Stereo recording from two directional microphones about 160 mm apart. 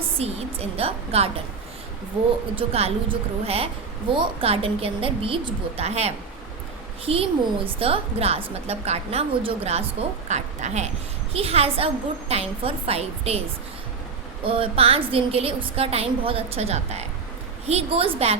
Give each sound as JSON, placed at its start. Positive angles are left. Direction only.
{"t": 0.2, "sound": "a woman's voice", "side_deg": -40}
{"t": 2.6, "sound": "a woman's voice", "side_deg": -35}
{"t": 14.4, "sound": "a woman's voice", "side_deg": -35}